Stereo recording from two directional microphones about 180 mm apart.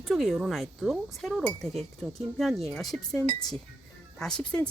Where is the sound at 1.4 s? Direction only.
10° left (ahead or behind).